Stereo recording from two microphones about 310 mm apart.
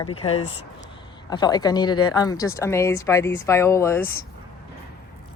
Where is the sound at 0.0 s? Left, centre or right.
Centre.